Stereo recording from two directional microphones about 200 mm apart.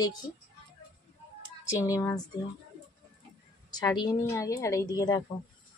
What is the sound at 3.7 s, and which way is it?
A woman's voice, 20° left (ahead or behind).